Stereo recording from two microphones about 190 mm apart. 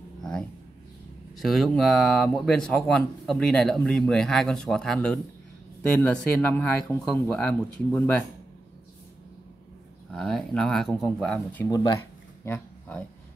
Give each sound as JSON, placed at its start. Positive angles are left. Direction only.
{"t": 0.2, "sound": "a sound", "side_deg": 0}
{"t": 1.4, "sound": "speech", "side_deg": 0}
{"t": 10.1, "sound": "speech", "side_deg": 0}
{"t": 11.6, "sound": "speech", "side_deg": 20}